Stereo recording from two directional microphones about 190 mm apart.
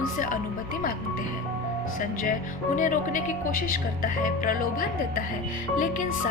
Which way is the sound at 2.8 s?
45° left (ahead or behind).